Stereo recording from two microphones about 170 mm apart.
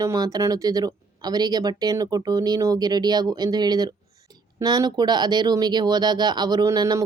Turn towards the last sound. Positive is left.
turn(degrees=-20)  # may be behind; listen again after turning